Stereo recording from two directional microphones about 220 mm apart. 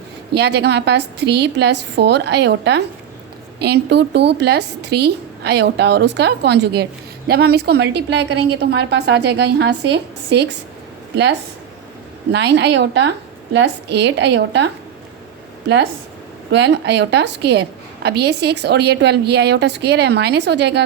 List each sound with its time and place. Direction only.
0.3 s a woman's voice: 50° right (ahead or behind)
16.5 s a woman's voice: 55° right (ahead or behind)